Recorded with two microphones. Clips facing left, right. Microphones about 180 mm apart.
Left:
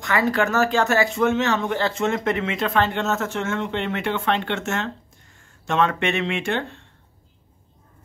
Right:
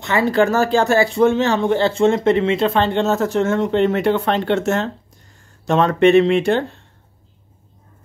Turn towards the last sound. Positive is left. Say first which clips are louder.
# right 8 dB
turn(degrees=-35)  # may be behind; listen again after turning